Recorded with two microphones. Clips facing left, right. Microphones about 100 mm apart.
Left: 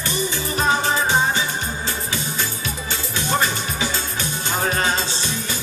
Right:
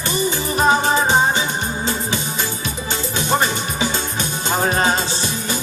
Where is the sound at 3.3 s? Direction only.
25° right (ahead or behind).